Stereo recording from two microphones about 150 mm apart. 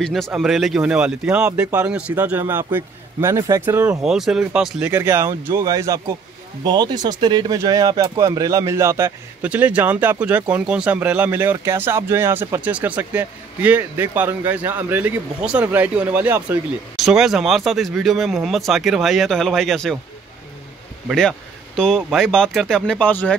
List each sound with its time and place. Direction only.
0.0 s speech: 5° left (ahead or behind); by 4.0 s 15° right (ahead or behind)
4.0 s speech: 5° right (ahead or behind)
16.9 s speech: centre (ahead or behind)
21.1 s speech: 5° left (ahead or behind)